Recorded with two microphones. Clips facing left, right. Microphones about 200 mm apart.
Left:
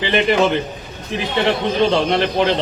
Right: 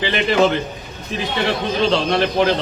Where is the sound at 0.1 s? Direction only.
20° left (ahead or behind).